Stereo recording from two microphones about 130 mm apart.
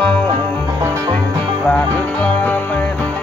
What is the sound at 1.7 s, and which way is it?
Music, 10° left (ahead or behind).